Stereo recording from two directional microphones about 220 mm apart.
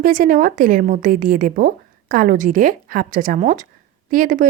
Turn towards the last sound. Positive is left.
turn(degrees=-40)  # may be behind; listen again after turning